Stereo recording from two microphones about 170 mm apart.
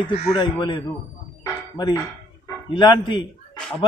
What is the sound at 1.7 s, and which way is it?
Dishes, 25° left (ahead or behind).